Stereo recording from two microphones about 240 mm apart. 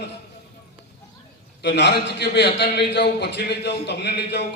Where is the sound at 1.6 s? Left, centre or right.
Left.